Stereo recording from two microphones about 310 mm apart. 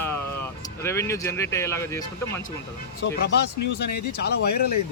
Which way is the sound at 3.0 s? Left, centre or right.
Left.